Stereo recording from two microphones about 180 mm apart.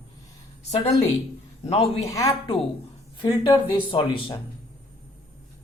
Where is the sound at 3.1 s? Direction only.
20° left (ahead or behind).